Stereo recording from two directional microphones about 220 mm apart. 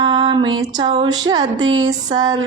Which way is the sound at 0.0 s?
20° right (ahead or behind).